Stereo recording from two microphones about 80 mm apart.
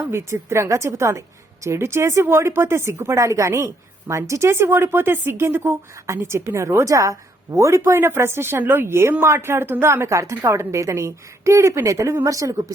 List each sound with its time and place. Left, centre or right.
0.1 s speech: right